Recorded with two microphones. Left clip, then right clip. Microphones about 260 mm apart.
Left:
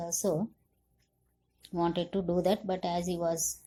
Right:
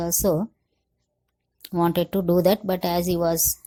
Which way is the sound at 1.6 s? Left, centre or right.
Right.